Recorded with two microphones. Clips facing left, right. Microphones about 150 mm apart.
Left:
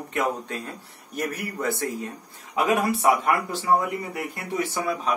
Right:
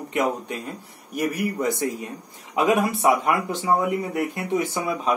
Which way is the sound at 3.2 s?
20° right (ahead or behind).